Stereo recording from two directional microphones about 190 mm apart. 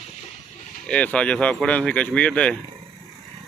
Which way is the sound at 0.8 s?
5° left (ahead or behind).